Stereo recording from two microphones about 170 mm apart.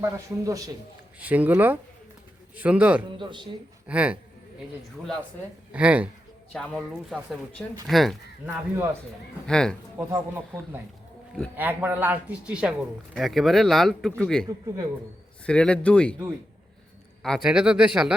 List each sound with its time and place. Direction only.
0.0 s speech: 20° right (ahead or behind)
1.2 s speech: 10° right (ahead or behind)
3.2 s speech: 30° right (ahead or behind)
3.8 s speech: 5° right (ahead or behind)
5.7 s speech: 10° right (ahead or behind)
8.4 s speech: 10° right (ahead or behind)
9.5 s speech: 5° left (ahead or behind)
10.0 s speech: 10° right (ahead or behind); by 14.4 s 5° left (ahead or behind)
15.4 s speech: 5° left (ahead or behind)
17.2 s speech: centre (ahead or behind)